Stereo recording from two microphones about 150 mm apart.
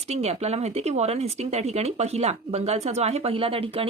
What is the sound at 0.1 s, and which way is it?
Speech, 45° right (ahead or behind).